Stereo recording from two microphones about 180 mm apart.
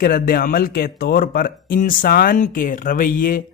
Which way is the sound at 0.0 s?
55° left (ahead or behind).